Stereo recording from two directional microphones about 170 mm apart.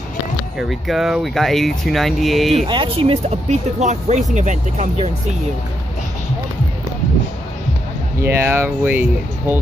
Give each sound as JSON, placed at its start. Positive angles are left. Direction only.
{"t": 0.6, "sound": "speech", "side_deg": 0}
{"t": 2.5, "sound": "speech", "side_deg": -30}
{"t": 8.2, "sound": "speech", "side_deg": -15}